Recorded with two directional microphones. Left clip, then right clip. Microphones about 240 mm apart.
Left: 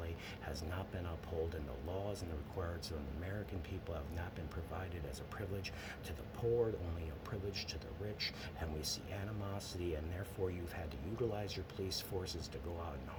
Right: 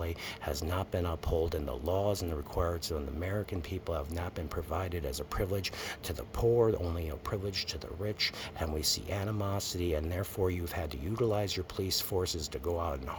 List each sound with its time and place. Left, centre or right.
0.0 s speech: right
5.3 s speech: right